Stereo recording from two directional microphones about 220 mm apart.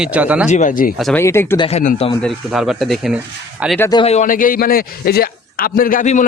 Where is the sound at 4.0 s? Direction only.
30° left (ahead or behind).